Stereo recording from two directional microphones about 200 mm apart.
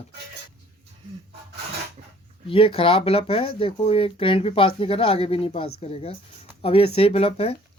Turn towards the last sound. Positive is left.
turn(degrees=30)  # may be behind; listen again after turning